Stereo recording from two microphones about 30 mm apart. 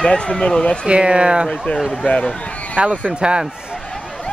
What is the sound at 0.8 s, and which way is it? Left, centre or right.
Speech, right.